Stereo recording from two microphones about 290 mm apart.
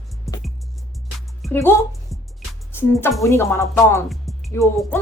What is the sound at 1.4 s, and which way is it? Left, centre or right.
Music, centre.